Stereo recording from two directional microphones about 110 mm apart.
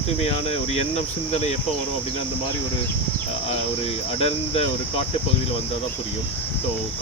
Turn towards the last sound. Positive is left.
turn(degrees=65)  # may be behind; listen again after turning